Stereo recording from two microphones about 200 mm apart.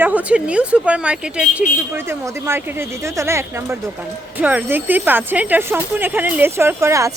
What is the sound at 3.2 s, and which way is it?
Speech, 15° right (ahead or behind).